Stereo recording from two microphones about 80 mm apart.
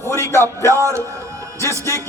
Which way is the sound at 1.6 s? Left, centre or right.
Left.